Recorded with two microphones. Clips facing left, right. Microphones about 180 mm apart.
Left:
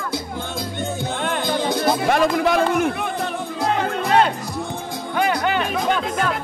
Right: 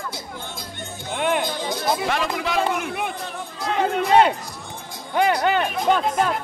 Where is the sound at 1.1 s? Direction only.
10° right (ahead or behind).